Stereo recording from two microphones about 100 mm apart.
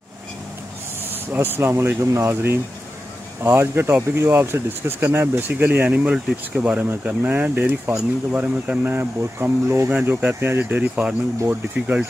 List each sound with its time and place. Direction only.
1.3 s speech: 20° right (ahead or behind)